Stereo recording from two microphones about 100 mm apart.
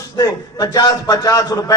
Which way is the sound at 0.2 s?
35° left (ahead or behind).